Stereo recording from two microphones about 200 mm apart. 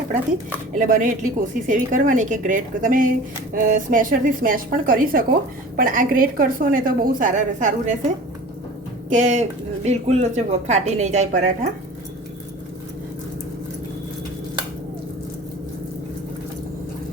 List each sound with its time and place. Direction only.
0.7 s a woman's voice: 40° right (ahead or behind)
9.0 s speech: 35° right (ahead or behind)